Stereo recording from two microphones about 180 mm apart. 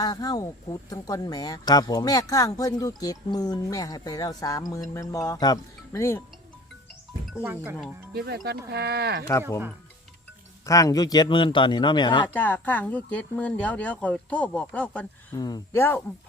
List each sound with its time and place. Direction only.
0.0 s speech: 20° left (ahead or behind)
7.4 s speech: 15° right (ahead or behind)
8.1 s speech: 65° right (ahead or behind)
10.7 s speech: 20° left (ahead or behind)
12.3 s speech: 10° left (ahead or behind)
15.4 s speech: 20° left (ahead or behind)